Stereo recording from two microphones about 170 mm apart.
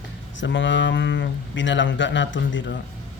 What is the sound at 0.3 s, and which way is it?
Speech, 90° left.